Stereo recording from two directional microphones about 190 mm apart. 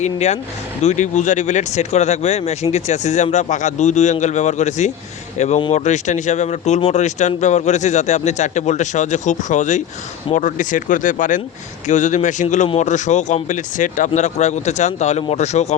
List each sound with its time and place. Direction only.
0.0 s speech: 35° left (ahead or behind)